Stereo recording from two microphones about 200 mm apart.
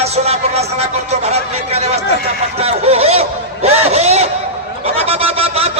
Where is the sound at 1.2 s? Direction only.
35° right (ahead or behind).